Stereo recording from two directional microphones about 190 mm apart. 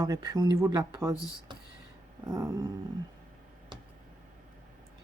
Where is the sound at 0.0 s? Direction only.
20° right (ahead or behind).